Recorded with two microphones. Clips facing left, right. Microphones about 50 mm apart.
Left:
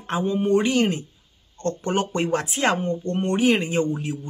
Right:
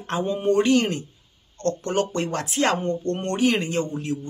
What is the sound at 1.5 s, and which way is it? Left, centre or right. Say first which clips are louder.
Speech: right 1 dB; centre.